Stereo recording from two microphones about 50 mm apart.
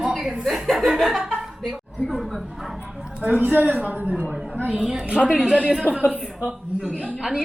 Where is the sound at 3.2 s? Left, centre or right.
Right.